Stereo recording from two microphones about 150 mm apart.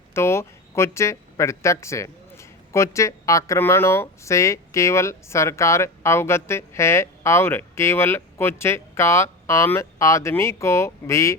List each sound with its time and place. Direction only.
0.1 s speech: 15° left (ahead or behind)